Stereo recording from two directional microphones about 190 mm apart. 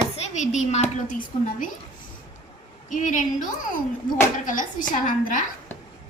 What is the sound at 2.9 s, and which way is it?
A woman's voice, 40° left (ahead or behind).